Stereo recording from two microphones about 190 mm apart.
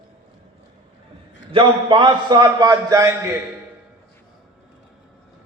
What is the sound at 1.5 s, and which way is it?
A man's voice, 25° right (ahead or behind).